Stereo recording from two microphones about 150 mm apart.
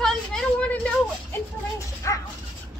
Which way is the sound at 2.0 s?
20° left (ahead or behind).